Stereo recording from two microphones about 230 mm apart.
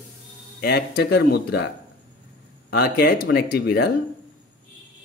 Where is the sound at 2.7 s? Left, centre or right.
Left.